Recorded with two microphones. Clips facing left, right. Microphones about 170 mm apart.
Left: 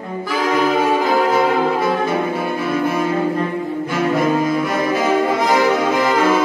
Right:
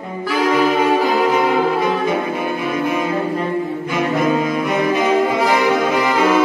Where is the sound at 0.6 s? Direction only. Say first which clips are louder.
Even; 10° right (ahead or behind).